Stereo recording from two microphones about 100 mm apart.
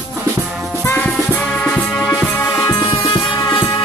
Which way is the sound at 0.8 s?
15° left (ahead or behind).